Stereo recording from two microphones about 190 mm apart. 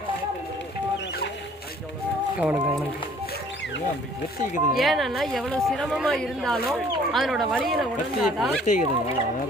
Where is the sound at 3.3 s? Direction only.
70° left (ahead or behind).